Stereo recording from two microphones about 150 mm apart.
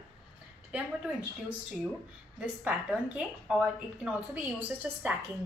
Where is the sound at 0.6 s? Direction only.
10° right (ahead or behind).